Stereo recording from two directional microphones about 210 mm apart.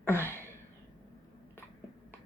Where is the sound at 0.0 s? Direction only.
10° left (ahead or behind).